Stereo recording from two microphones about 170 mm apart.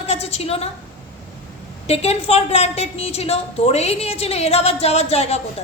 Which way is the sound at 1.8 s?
40° left (ahead or behind).